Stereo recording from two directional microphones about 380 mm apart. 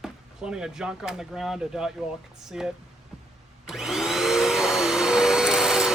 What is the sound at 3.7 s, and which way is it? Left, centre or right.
Vacuum cleaner, centre.